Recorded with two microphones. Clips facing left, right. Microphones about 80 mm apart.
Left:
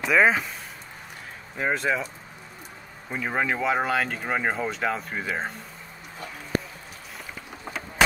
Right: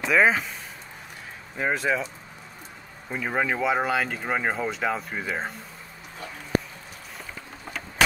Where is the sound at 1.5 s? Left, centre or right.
Centre.